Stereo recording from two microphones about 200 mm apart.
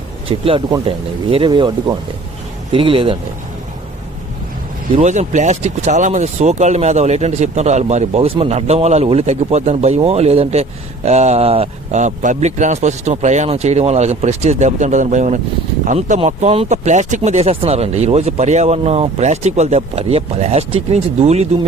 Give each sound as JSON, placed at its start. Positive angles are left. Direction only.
{"t": 0.3, "sound": "speech", "side_deg": -25}
{"t": 4.9, "sound": "speech", "side_deg": -35}